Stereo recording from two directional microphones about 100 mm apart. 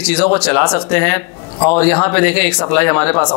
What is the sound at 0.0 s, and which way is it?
Speech, 15° left (ahead or behind).